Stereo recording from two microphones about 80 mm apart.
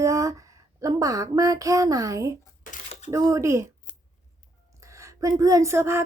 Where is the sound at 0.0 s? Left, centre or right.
Right.